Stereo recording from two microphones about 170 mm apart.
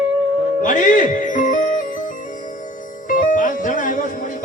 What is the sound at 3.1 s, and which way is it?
Music, 50° left (ahead or behind).